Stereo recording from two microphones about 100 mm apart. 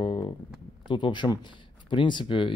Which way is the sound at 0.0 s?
65° left (ahead or behind).